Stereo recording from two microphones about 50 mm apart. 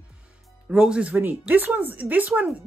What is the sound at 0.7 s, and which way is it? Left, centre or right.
Speech, centre.